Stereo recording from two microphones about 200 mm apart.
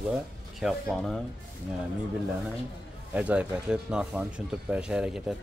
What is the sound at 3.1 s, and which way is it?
Speech, 5° right (ahead or behind).